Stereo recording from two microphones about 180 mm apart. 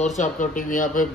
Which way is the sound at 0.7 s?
50° left (ahead or behind).